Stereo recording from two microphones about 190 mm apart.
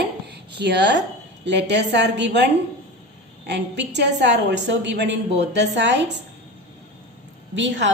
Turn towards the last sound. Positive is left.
turn(degrees=-70)  # may be behind; listen again after turning